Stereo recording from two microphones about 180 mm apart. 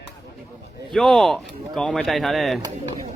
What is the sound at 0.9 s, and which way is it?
Speech, centre (ahead or behind).